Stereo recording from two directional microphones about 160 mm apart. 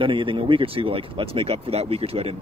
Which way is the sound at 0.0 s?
30° right (ahead or behind).